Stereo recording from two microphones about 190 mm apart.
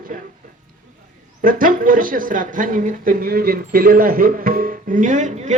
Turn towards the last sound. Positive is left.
turn(degrees=-40)  # may be behind; listen again after turning